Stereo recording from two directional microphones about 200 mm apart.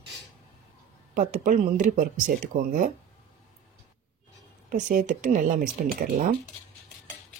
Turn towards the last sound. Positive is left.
turn(degrees=-45)  # may be behind; listen again after turning